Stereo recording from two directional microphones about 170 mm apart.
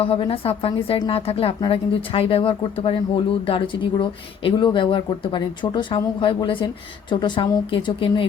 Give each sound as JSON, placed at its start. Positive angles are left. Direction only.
{"t": 0.0, "sound": "a woman's voice", "side_deg": 35}